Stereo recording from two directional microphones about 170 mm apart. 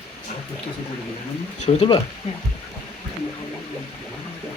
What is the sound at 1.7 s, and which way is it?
Speech, 30° left (ahead or behind).